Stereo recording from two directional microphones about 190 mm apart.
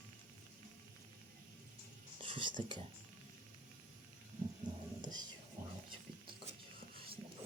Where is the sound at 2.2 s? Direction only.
25° right (ahead or behind).